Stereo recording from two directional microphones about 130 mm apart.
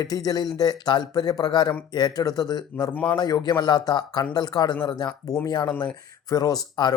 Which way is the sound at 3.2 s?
30° left (ahead or behind).